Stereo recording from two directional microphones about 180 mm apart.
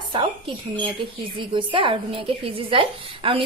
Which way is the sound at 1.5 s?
30° right (ahead or behind).